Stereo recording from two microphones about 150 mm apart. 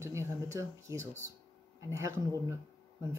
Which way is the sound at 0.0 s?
20° right (ahead or behind).